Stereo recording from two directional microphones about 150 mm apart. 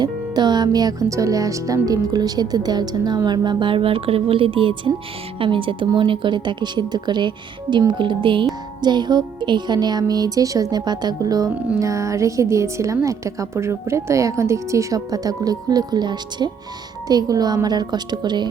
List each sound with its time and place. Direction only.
0.0 s speech: 30° right (ahead or behind)